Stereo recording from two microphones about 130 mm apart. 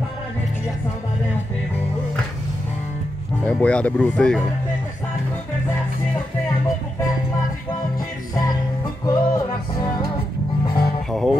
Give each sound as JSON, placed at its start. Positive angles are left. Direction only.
{"t": 3.4, "sound": "speech", "side_deg": 10}
{"t": 9.0, "sound": "music", "side_deg": 30}
{"t": 11.1, "sound": "music", "side_deg": 0}